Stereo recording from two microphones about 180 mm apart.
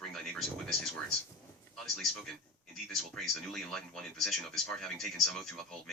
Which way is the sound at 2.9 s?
Centre (ahead or behind).